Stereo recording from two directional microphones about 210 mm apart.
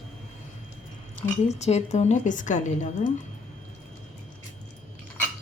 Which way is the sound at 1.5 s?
30° left (ahead or behind).